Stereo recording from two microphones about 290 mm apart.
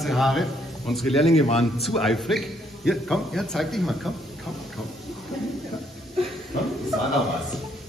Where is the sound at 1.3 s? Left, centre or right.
Left.